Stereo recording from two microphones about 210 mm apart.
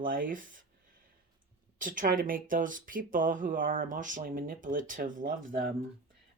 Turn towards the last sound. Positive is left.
turn(degrees=-40)  # may be behind; listen again after turning